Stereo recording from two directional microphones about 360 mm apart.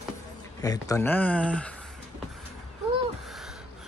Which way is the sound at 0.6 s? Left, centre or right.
Centre.